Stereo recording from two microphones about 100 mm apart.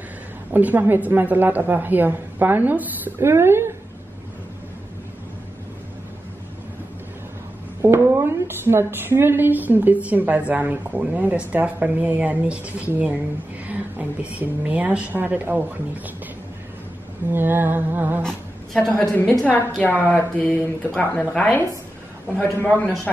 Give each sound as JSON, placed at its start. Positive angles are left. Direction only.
{"t": 0.5, "sound": "a woman's voice", "side_deg": -15}
{"t": 7.8, "sound": "a woman's voice", "side_deg": -25}
{"t": 17.3, "sound": "a woman's voice", "side_deg": -20}
{"t": 18.2, "sound": "a sound", "side_deg": 5}
{"t": 18.9, "sound": "speech", "side_deg": 15}